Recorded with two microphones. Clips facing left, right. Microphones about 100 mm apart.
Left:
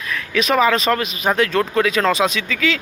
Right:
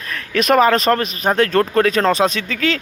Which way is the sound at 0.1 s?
45° right (ahead or behind).